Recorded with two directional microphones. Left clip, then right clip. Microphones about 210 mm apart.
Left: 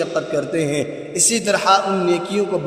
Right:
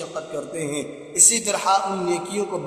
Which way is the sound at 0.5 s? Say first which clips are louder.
Left 8 dB; 25° left (ahead or behind).